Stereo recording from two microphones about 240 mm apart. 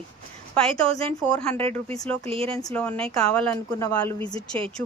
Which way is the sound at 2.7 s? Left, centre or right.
Centre.